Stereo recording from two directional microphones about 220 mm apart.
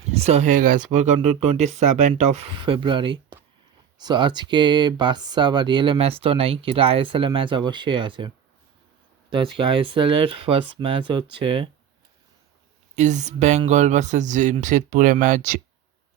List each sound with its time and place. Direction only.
0.1 s speech: 30° right (ahead or behind)
9.3 s speech: 25° right (ahead or behind)
13.0 s speech: 30° right (ahead or behind)